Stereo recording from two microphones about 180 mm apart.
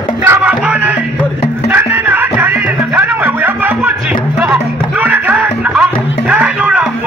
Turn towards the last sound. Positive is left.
turn(degrees=-5)  # may be behind; listen again after turning